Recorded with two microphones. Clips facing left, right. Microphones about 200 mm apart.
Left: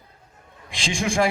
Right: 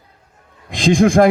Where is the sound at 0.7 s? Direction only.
55° right (ahead or behind).